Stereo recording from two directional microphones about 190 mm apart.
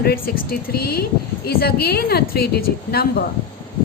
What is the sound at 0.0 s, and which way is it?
A woman's voice, 55° left (ahead or behind).